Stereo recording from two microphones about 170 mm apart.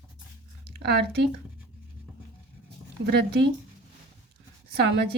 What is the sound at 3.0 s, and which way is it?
Speech, 75° right (ahead or behind).